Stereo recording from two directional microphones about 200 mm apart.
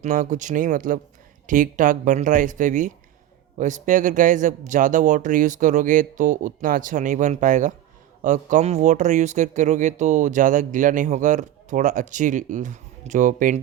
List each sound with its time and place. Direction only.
0.0 s speech: 40° right (ahead or behind)